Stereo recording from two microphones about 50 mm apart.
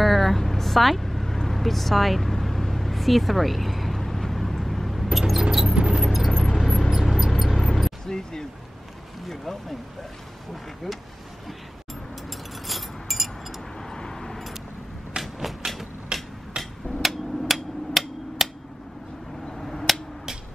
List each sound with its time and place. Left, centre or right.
0.0 s vehicle: centre
5.8 s a sound: centre
6.0 s vehicle: centre
6.3 s vehicle: centre
8.1 s speech: centre
12.3 s vehicle: centre
13.7 s vehicle: centre
15.2 s a sound: centre
16.1 s hammer: centre
16.6 s a sound: centre
17.0 s hammer: centre
19.6 s finger snapping: centre